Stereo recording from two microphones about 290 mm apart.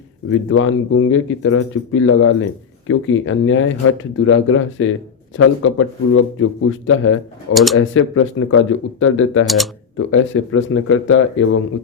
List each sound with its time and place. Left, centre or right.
0.3 s speech: left
7.5 s speech: centre
7.8 s speech: left